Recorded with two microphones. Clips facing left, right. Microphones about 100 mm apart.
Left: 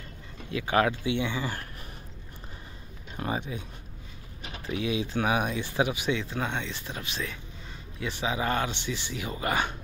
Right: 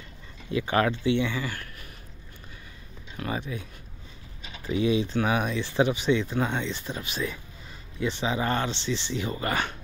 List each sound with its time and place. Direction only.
0.6 s speech: 5° left (ahead or behind)
3.2 s speech: 20° left (ahead or behind)
4.8 s speech: 5° left (ahead or behind)